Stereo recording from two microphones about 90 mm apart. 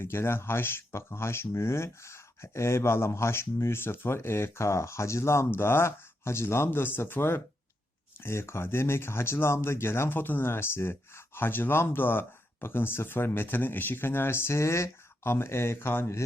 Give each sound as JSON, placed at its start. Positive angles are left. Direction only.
{"t": 0.0, "sound": "speech", "side_deg": 25}